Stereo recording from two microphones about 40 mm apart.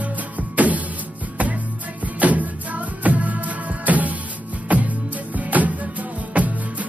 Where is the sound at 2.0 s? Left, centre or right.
Right.